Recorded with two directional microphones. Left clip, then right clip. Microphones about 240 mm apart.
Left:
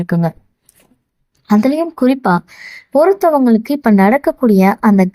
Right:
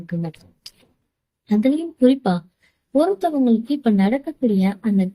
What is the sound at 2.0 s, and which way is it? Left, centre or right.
Speech, left.